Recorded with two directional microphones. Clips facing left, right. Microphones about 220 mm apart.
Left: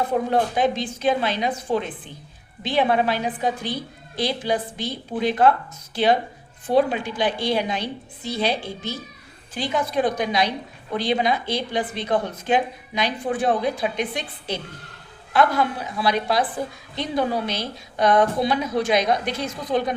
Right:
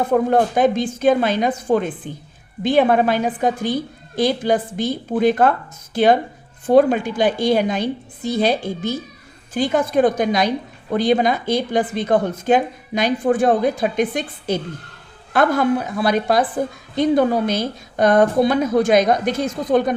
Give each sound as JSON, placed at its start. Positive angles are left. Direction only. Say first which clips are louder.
{"t": 0.1, "sound": "a woman's voice", "louder": "right 5 dB", "side_deg": -50}